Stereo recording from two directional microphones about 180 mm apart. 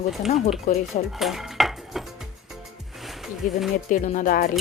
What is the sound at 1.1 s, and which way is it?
Dishes, centre (ahead or behind).